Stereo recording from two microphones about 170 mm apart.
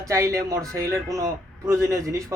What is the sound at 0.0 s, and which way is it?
A man's voice, 20° right (ahead or behind).